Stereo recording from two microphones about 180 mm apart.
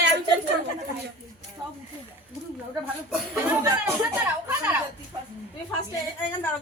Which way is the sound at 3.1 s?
5° right (ahead or behind).